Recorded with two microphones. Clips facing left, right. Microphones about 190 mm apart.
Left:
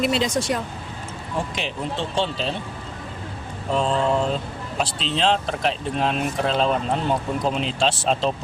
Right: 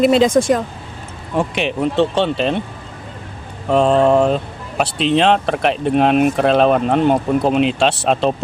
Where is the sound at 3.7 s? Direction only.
65° right (ahead or behind).